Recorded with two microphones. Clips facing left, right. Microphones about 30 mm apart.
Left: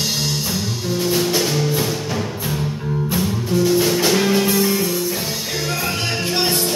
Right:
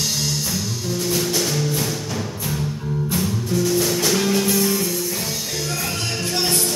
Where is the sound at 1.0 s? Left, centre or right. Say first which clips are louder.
Left 3 dB; centre.